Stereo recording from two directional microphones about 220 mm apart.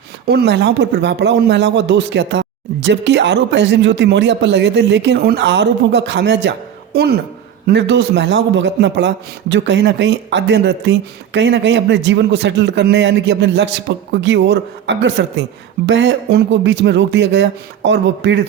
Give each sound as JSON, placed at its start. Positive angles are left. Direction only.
{"t": 0.3, "sound": "speech", "side_deg": -50}